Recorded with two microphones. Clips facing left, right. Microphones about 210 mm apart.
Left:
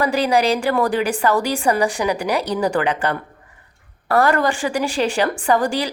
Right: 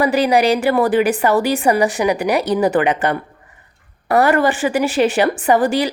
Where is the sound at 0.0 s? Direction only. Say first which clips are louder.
Right 3 dB; 15° right (ahead or behind).